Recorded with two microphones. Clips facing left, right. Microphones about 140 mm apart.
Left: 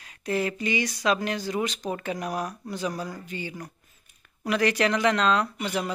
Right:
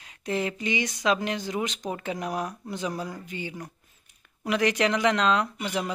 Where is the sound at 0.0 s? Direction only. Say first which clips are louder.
Left 1 dB; 20° right (ahead or behind).